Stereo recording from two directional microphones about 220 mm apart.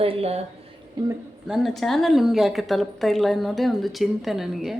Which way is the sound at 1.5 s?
Centre (ahead or behind).